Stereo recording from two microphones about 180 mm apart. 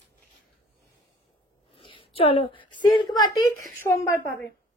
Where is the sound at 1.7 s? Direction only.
30° left (ahead or behind).